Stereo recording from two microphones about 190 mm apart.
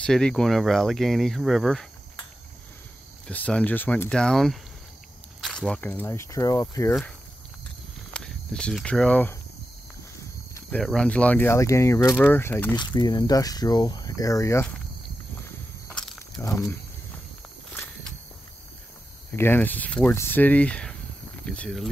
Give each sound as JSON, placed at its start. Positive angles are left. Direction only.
{"t": 0.0, "sound": "speech", "side_deg": 5}
{"t": 3.3, "sound": "speech", "side_deg": 5}
{"t": 6.9, "sound": "speech", "side_deg": 5}
{"t": 10.8, "sound": "speech", "side_deg": 5}
{"t": 12.9, "sound": "speech", "side_deg": 20}
{"t": 16.3, "sound": "speech", "side_deg": 15}
{"t": 19.3, "sound": "speech", "side_deg": 10}